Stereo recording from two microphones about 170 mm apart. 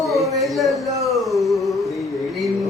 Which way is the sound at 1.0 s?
Centre (ahead or behind).